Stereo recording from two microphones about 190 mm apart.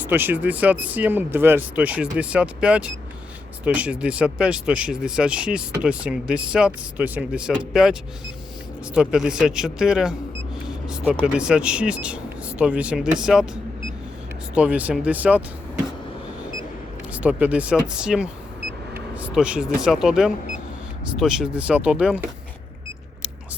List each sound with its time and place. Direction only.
0.0 s speech: 10° right (ahead or behind)
9.0 s speech: 5° right (ahead or behind)
14.5 s speech: 5° right (ahead or behind)
17.1 s speech: 5° right (ahead or behind)